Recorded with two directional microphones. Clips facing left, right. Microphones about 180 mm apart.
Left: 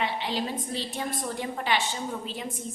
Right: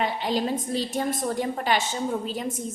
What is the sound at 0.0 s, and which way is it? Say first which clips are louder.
A woman's voice: right 4 dB; 45° right (ahead or behind).